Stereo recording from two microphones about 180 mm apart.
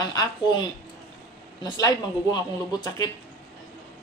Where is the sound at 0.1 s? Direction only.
25° left (ahead or behind).